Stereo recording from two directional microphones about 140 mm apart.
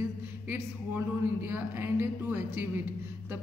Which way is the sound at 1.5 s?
15° right (ahead or behind).